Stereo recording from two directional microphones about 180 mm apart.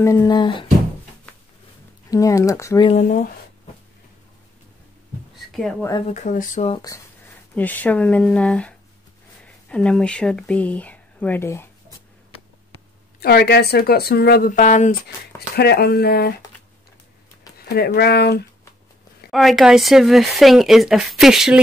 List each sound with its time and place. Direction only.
0.0 s speech: 20° left (ahead or behind)
2.0 s speech: 20° left (ahead or behind)
2.9 s speech: 35° left (ahead or behind)
5.5 s a woman's voice: centre (ahead or behind)
6.0 s speech: 45° left (ahead or behind)
6.7 s speech: 20° left (ahead or behind)
7.5 s speech: 10° left (ahead or behind)
13.2 s speech: 60° left (ahead or behind)
17.6 s speech: 60° left (ahead or behind)
19.3 s speech: centre (ahead or behind)